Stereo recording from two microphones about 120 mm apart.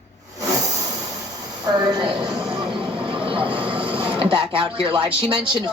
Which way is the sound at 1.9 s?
40° right (ahead or behind).